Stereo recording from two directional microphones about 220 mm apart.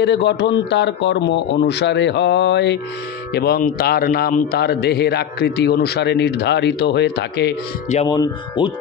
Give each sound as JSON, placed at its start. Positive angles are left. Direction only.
{"t": 0.0, "sound": "a man's voice", "side_deg": 50}
{"t": 8.1, "sound": "speech", "side_deg": 20}